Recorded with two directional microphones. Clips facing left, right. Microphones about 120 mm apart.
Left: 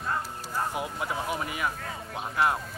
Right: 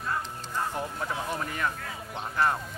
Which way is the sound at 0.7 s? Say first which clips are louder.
Left 1 dB; 10° left (ahead or behind).